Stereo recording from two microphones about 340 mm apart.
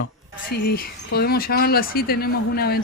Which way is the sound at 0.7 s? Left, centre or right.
Left.